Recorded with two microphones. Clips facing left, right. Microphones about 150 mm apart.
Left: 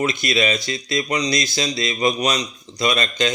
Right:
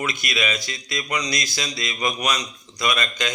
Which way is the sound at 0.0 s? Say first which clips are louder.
Left 6 dB; 25° left (ahead or behind).